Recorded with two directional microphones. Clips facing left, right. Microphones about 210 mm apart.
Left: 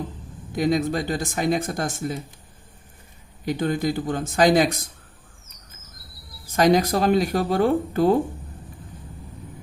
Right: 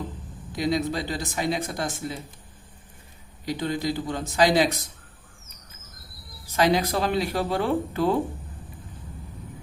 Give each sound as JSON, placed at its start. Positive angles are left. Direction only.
{"t": 0.5, "sound": "speech", "side_deg": 50}
{"t": 3.4, "sound": "speech", "side_deg": 50}
{"t": 6.6, "sound": "speech", "side_deg": 40}